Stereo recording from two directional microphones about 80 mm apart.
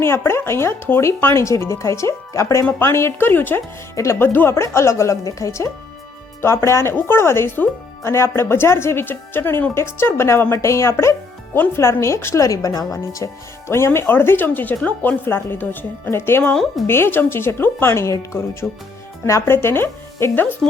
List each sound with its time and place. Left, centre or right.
0.0 s speech: left
13.7 s speech: left
16.4 s speech: centre
16.8 s speech: left